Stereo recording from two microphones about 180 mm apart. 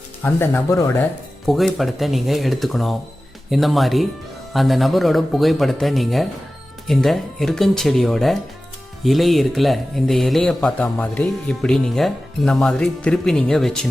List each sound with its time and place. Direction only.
0.2 s speech: 10° left (ahead or behind)
1.5 s speech: centre (ahead or behind)